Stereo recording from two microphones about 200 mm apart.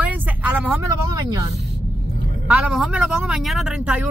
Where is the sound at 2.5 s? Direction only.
5° right (ahead or behind).